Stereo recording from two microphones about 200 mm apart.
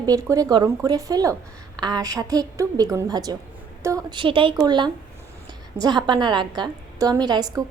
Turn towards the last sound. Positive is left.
turn(degrees=-20)  # may be behind; listen again after turning